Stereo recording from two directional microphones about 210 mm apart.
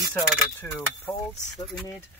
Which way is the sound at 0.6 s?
5° left (ahead or behind).